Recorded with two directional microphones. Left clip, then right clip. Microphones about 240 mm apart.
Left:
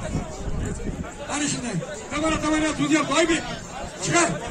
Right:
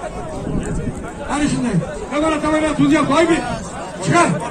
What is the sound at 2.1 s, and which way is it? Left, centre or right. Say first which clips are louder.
A man's voice: right 6 dB; left.